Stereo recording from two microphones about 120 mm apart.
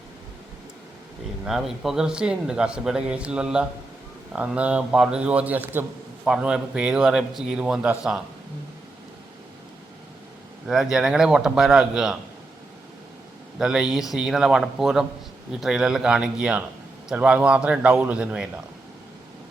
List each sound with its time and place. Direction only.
1.5 s speech: 5° right (ahead or behind)
10.7 s a man's voice: 5° right (ahead or behind)
13.6 s a man's voice: 5° right (ahead or behind)